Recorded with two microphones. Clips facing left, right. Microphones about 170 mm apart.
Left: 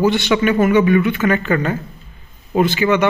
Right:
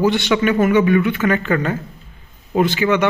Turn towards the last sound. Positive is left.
turn(degrees=10)  # may be behind; listen again after turning